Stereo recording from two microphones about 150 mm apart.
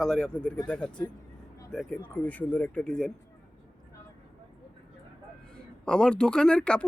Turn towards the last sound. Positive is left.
turn(degrees=5)  # may be behind; listen again after turning